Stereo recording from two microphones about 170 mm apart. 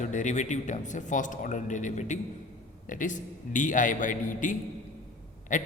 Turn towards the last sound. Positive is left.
turn(degrees=45)  # may be behind; listen again after turning